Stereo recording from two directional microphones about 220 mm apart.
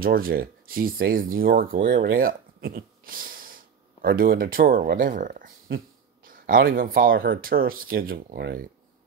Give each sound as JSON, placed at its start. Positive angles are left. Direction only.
{"t": 0.0, "sound": "speech", "side_deg": -40}